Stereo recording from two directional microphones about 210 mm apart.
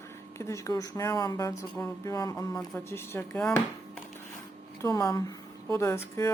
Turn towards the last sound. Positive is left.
turn(degrees=15)  # may be behind; listen again after turning